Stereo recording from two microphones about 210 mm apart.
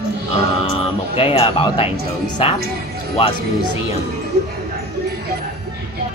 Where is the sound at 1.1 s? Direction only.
25° left (ahead or behind).